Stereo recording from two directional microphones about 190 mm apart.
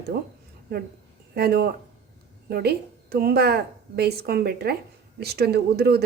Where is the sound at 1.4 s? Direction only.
55° right (ahead or behind).